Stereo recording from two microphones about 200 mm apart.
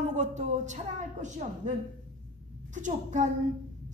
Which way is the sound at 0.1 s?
35° right (ahead or behind).